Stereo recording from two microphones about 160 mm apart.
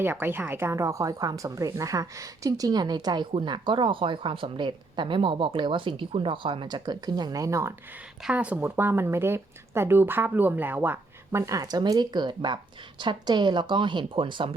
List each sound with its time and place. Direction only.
0.0 s speech: 15° right (ahead or behind)
8.2 s speech: 5° right (ahead or behind); by 14.5 s 30° right (ahead or behind)